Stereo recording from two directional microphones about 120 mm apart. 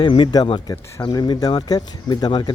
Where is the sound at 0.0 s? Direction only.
40° left (ahead or behind).